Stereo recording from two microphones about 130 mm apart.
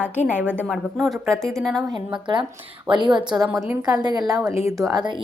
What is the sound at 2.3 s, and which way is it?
Speech, 35° right (ahead or behind).